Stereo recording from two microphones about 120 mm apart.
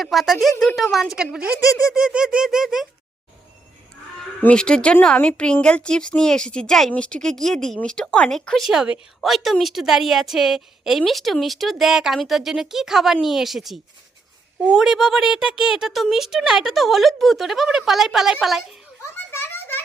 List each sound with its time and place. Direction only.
0.0 s speech: centre (ahead or behind)
1.9 s squeak: 5° right (ahead or behind)
4.4 s speech: 5° left (ahead or behind)
19.1 s a sound: 20° left (ahead or behind)